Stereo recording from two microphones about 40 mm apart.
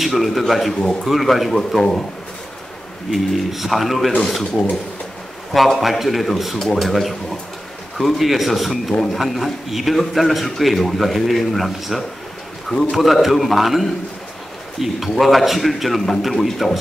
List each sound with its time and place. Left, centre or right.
0.0 s a man's voice: centre
1.8 s speech: centre
3.1 s a man's voice: centre
5.5 s a man's voice: centre